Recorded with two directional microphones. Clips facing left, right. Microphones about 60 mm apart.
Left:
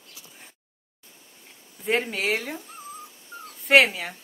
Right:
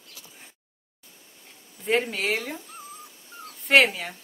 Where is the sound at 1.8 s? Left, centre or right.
Centre.